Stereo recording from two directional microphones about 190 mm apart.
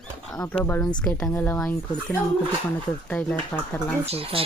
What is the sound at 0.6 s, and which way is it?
Speech, 10° left (ahead or behind).